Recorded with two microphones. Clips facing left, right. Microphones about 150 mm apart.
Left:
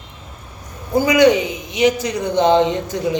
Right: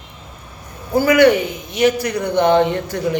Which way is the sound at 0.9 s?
15° left (ahead or behind).